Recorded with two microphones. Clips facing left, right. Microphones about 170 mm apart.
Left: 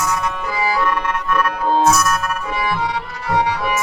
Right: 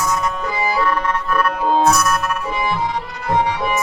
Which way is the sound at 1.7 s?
5° left (ahead or behind).